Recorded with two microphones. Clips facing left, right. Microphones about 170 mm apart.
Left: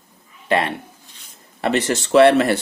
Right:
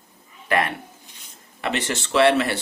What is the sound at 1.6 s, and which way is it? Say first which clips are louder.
Speech: left 6 dB; 40° left (ahead or behind).